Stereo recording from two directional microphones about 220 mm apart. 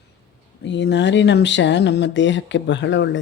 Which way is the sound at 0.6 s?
55° left (ahead or behind).